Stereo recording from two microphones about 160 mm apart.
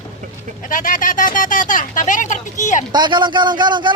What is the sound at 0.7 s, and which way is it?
Speech, 55° left (ahead or behind).